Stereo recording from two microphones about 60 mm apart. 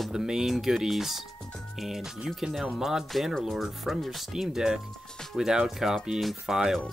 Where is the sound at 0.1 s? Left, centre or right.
Centre.